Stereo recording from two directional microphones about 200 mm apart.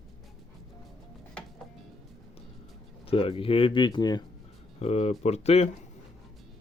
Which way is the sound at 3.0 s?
30° left (ahead or behind).